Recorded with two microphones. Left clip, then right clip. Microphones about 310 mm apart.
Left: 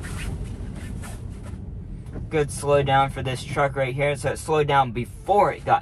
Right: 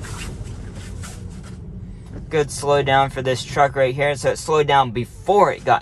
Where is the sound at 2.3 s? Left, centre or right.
Right.